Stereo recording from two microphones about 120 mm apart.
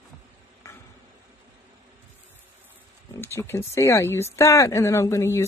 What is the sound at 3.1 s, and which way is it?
A woman's voice, 20° left (ahead or behind).